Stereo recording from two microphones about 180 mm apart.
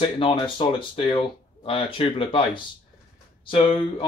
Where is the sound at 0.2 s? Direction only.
30° left (ahead or behind).